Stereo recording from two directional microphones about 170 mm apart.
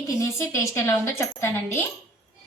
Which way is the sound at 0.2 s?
15° left (ahead or behind).